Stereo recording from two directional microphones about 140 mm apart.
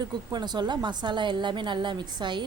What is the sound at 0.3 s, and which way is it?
Speech, 30° right (ahead or behind).